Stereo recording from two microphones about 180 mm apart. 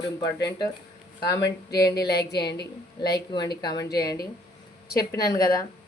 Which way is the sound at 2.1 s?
65° left (ahead or behind).